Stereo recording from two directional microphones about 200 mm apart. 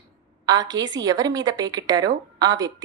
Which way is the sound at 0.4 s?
20° right (ahead or behind).